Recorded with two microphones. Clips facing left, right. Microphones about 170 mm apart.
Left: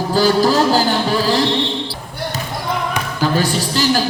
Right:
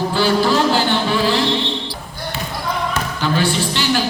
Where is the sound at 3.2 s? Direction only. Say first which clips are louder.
Left 1 dB; 40° left (ahead or behind).